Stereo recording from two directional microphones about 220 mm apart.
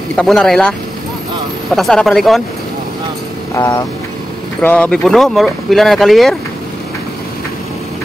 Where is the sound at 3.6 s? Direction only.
15° left (ahead or behind); by 6.4 s centre (ahead or behind).